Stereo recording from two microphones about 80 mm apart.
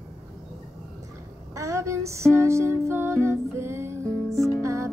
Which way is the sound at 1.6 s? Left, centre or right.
Right.